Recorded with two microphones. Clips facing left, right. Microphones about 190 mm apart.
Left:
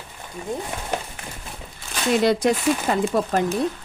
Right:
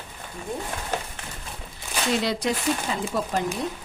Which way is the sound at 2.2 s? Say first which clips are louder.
Left 6 dB; 50° left (ahead or behind).